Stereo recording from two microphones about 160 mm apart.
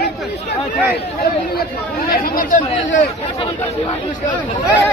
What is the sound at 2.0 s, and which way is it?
Speech, 65° left (ahead or behind).